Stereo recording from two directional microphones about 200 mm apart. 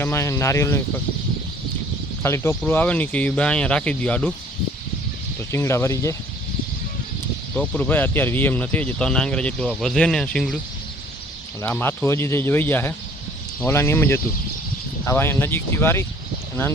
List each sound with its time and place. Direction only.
0.0 s speech: 15° left (ahead or behind)
2.2 s speech: 15° left (ahead or behind)
5.5 s speech: 15° left (ahead or behind)
7.5 s speech: 5° left (ahead or behind)
11.6 s speech: 10° left (ahead or behind)